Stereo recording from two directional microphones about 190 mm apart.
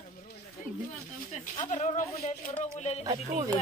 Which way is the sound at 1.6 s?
40° left (ahead or behind).